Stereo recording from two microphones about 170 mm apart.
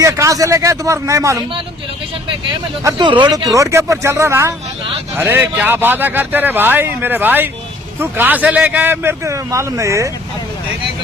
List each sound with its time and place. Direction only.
0.0 s speech: 20° right (ahead or behind)
2.8 s speech: 25° right (ahead or behind)